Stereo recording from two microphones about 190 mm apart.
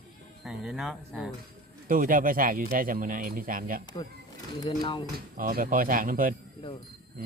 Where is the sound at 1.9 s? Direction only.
45° right (ahead or behind).